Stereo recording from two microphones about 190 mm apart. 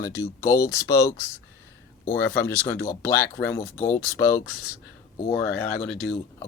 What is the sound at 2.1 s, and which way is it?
Speech, 10° left (ahead or behind).